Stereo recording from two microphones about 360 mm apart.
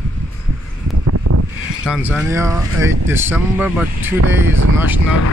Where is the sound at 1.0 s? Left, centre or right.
Right.